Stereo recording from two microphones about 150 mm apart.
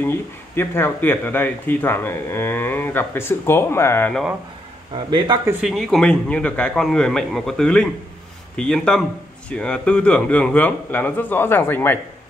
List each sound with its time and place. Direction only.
0.6 s speech: 15° left (ahead or behind)
4.9 s speech: 30° right (ahead or behind)
5.6 s a man's voice: centre (ahead or behind)